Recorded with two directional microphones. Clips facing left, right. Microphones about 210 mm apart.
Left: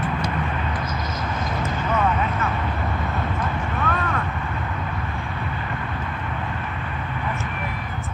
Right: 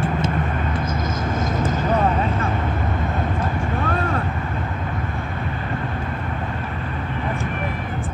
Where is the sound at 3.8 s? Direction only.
30° right (ahead or behind).